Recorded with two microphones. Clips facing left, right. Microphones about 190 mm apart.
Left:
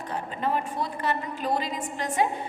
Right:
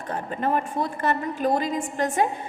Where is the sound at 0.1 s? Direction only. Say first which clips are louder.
Right 3 dB; 50° right (ahead or behind).